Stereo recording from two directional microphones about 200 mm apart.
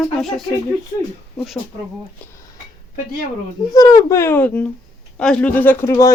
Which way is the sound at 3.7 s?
20° left (ahead or behind).